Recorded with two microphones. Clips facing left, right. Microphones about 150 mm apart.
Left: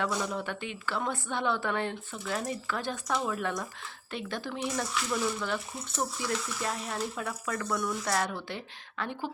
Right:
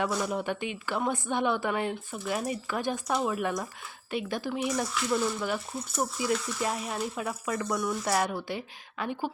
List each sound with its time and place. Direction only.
0.0 s speech: 15° right (ahead or behind)